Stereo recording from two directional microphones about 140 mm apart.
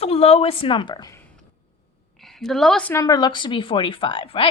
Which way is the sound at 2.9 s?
25° left (ahead or behind).